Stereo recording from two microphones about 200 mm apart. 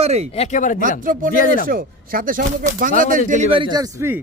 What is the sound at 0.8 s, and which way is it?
Speech, 40° right (ahead or behind).